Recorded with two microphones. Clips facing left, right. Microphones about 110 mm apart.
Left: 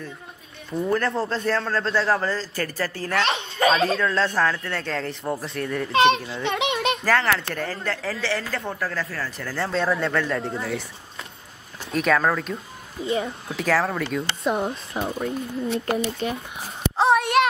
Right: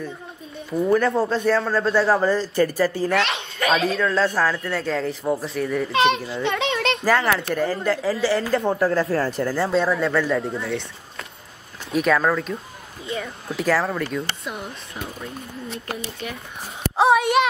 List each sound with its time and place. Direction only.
0.7 s a man's voice: 5° right (ahead or behind)
3.3 s a sound: 30° left (ahead or behind)
4.0 s a man's voice: 5° right (ahead or behind)
5.9 s a child's voice: 30° left (ahead or behind)
6.4 s children playing: 20° left (ahead or behind)
7.2 s a man's voice: 5° right (ahead or behind)
8.4 s a woman's voice: 25° right (ahead or behind)
9.5 s a man's voice: 10° right (ahead or behind)
11.9 s a man's voice: centre (ahead or behind)
13.0 s a child's voice: 25° left (ahead or behind)
13.6 s a man's voice: centre (ahead or behind)
14.4 s speech: 30° left (ahead or behind)
16.9 s a sound: 5° right (ahead or behind)